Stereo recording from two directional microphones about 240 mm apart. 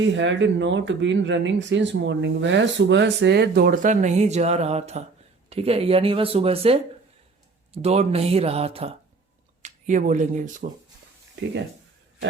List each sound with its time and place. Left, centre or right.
0.1 s speech: right
7.8 s speech: right